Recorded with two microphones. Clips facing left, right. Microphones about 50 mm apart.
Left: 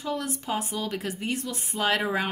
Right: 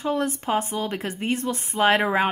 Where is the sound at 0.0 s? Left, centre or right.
Right.